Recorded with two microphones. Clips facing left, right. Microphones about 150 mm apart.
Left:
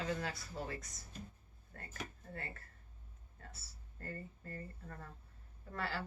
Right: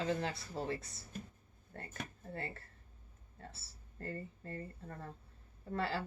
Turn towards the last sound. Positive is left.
turn(degrees=-25)  # may be behind; listen again after turning